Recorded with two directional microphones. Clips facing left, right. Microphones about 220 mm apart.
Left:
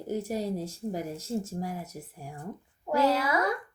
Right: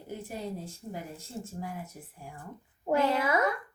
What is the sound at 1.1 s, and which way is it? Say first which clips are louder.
Speech: left 8 dB; 90° left.